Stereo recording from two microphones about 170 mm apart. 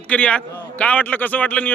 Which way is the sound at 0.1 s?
5° left (ahead or behind).